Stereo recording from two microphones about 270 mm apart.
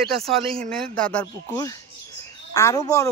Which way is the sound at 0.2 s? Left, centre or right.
Centre.